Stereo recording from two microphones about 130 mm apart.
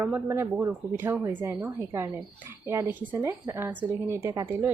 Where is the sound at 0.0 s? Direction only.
15° right (ahead or behind).